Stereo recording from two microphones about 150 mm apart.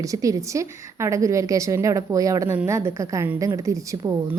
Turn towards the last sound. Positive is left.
turn(degrees=-20)  # may be behind; listen again after turning